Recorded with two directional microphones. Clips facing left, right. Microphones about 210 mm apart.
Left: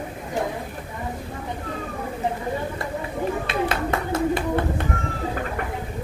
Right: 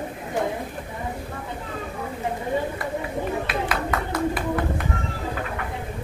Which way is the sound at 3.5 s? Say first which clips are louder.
Left 2 dB; 25° left (ahead or behind).